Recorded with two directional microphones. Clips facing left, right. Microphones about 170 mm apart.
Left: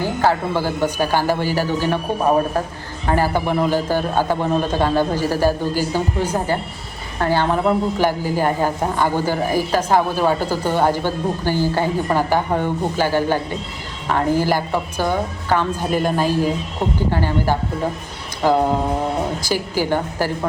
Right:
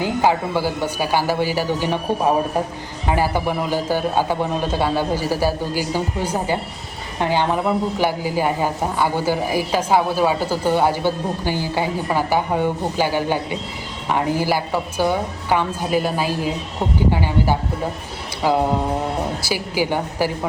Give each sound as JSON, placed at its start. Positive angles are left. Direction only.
{"t": 0.0, "sound": "a man's voice", "side_deg": -15}
{"t": 3.1, "sound": "a man's voice", "side_deg": -10}
{"t": 19.7, "sound": "a man's voice", "side_deg": -10}